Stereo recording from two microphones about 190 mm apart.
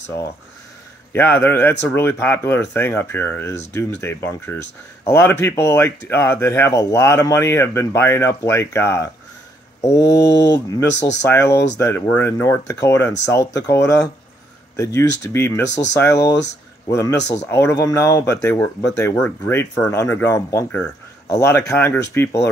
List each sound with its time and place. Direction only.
1.1 s speech: 10° left (ahead or behind)
9.8 s mantra: 15° left (ahead or behind)
10.2 s speech: 65° left (ahead or behind)
11.1 s speech: 10° left (ahead or behind)
16.2 s speech: 60° left (ahead or behind)
16.8 s speech: 15° left (ahead or behind)